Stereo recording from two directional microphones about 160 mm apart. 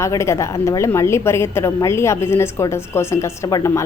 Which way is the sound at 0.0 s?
20° left (ahead or behind).